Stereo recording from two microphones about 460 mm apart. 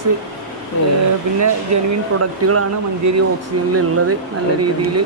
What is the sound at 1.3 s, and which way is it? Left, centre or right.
Speech, right.